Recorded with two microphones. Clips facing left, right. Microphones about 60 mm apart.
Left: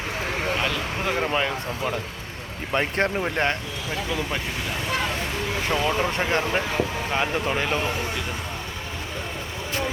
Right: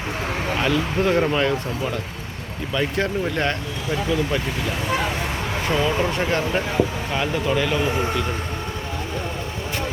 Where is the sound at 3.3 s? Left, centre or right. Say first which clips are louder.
Right 1 dB; left.